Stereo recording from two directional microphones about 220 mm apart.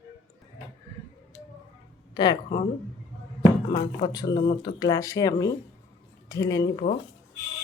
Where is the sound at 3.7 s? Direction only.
20° left (ahead or behind).